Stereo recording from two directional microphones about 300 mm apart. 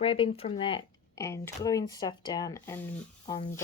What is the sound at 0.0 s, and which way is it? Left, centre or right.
Speech, centre.